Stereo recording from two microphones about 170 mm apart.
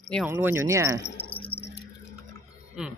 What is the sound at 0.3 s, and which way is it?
Speech, 15° right (ahead or behind).